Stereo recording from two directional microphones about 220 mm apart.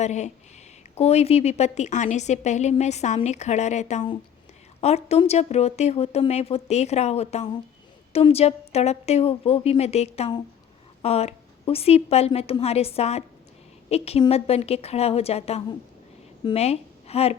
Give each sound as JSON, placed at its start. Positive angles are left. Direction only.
{"t": 0.0, "sound": "a woman's voice", "side_deg": 30}